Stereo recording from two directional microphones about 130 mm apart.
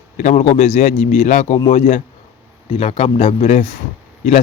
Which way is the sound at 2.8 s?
50° left (ahead or behind).